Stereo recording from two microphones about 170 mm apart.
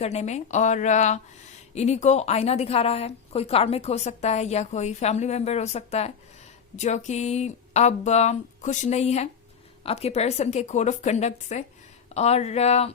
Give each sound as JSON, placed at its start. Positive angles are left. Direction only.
{"t": 0.0, "sound": "a woman's voice", "side_deg": 40}